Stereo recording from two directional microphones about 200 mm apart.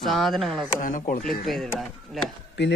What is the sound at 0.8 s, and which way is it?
Speech, 40° left (ahead or behind).